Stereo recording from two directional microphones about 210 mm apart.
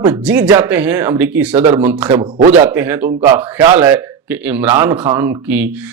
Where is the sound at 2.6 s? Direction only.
10° right (ahead or behind).